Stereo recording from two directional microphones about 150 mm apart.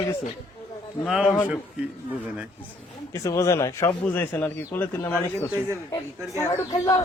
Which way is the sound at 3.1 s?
20° left (ahead or behind).